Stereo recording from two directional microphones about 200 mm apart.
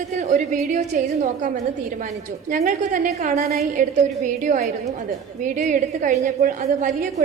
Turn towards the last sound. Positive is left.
turn(degrees=-35)  # may be behind; listen again after turning